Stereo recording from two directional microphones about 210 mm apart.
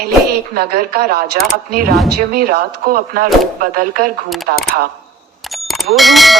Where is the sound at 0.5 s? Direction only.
45° right (ahead or behind).